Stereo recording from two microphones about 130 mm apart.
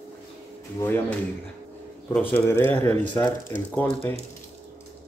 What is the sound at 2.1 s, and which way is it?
Speech, 15° left (ahead or behind).